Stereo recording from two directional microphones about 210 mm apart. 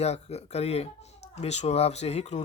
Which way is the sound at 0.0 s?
30° left (ahead or behind).